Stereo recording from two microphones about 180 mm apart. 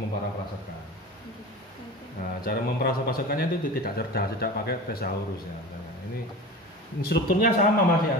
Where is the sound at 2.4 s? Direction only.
55° left (ahead or behind).